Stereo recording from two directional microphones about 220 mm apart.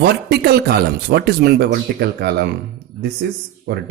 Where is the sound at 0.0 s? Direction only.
45° right (ahead or behind).